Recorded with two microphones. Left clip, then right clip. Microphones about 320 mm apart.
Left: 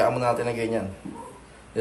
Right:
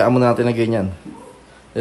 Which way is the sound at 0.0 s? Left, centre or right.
Right.